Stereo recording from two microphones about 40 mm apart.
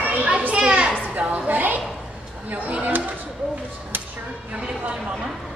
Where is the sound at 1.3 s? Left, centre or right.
Right.